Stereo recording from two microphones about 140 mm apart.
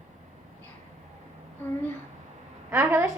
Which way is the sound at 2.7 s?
15° right (ahead or behind).